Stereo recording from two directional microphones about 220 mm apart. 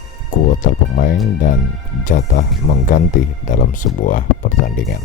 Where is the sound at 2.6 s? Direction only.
35° left (ahead or behind).